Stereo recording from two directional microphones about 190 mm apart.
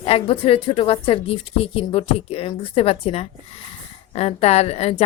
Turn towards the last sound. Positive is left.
turn(degrees=30)  # may be behind; listen again after turning